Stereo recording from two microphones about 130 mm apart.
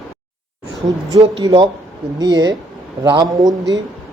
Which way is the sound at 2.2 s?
30° right (ahead or behind).